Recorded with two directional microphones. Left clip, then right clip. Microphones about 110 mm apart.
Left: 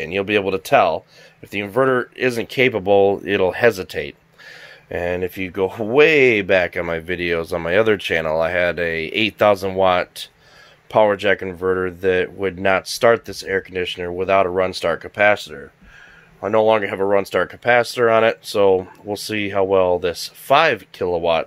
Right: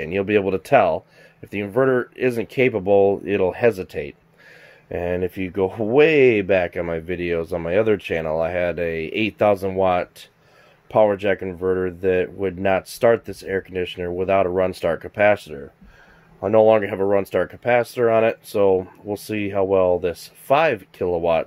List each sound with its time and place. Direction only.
0.0 s speech: 50° right (ahead or behind)
1.8 s speech: 30° right (ahead or behind)
4.8 s speech: 30° right (ahead or behind); by 15.4 s 50° right (ahead or behind)
16.4 s speech: 60° right (ahead or behind)
17.2 s speech: 35° right (ahead or behind)